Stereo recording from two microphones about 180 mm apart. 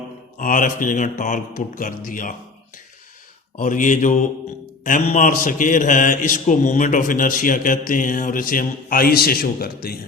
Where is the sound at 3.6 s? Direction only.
45° left (ahead or behind).